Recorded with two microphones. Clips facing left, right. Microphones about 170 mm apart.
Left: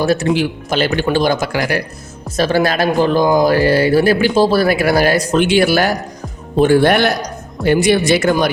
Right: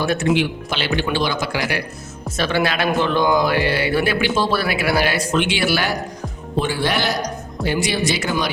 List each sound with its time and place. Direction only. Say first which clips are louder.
0.0 s speech: left 4 dB; 40° left (ahead or behind)